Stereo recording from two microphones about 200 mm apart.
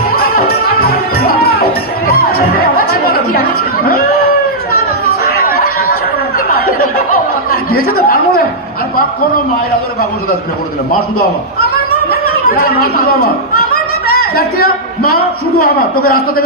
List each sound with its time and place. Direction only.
0.8 s music: 50° left (ahead or behind)
5.4 s chatter: 50° left (ahead or behind)
6.7 s snicker: 90° left
7.8 s a sound: 50° left (ahead or behind)
12.5 s a man's voice: 50° left (ahead or behind)
15.0 s a man's voice: 50° left (ahead or behind)